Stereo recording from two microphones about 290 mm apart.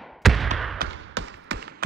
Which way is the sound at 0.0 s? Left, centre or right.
Centre.